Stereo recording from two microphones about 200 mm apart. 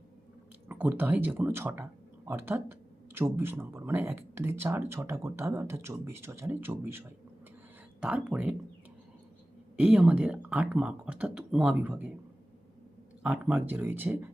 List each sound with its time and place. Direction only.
0.7 s speech: 10° right (ahead or behind)
9.7 s speech: 5° right (ahead or behind)
13.2 s speech: 5° right (ahead or behind)